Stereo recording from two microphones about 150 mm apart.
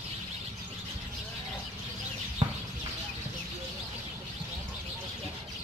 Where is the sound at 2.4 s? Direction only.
35° right (ahead or behind).